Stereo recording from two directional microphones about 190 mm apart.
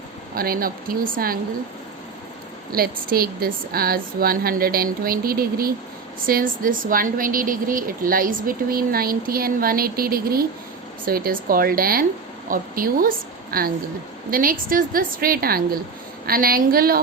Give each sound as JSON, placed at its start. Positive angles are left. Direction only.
{"t": 0.3, "sound": "a woman's voice", "side_deg": -50}
{"t": 2.7, "sound": "a woman's voice", "side_deg": -50}